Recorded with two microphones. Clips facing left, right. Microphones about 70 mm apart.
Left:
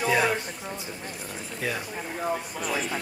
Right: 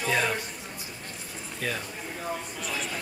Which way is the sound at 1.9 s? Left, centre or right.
Left.